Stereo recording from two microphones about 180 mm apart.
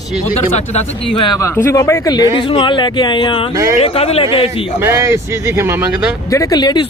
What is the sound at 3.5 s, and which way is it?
Speech, 15° right (ahead or behind).